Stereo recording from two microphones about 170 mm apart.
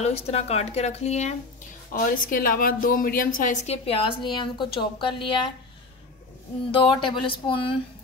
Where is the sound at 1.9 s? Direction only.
55° left (ahead or behind); by 5.2 s 30° left (ahead or behind).